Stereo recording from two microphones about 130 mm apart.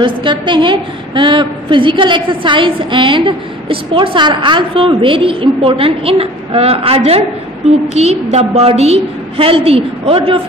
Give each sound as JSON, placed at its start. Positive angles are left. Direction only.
{"t": 0.0, "sound": "a woman's voice", "side_deg": -40}